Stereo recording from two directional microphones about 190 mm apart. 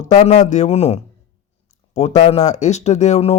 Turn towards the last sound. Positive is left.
turn(degrees=35)  # may be behind; listen again after turning